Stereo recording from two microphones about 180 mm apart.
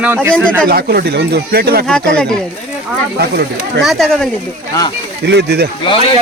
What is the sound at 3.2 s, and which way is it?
Speech, 65° right (ahead or behind).